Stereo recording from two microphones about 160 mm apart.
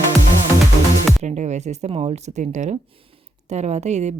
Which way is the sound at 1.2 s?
45° right (ahead or behind).